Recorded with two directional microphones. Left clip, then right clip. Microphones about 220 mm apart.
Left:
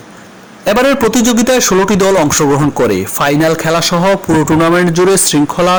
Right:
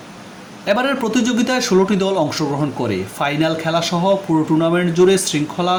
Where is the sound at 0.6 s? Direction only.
50° left (ahead or behind).